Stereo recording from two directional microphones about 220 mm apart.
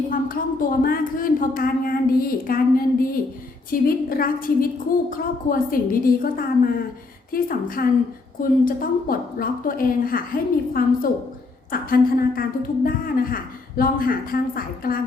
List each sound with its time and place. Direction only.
0.1 s a woman's voice: 40° left (ahead or behind)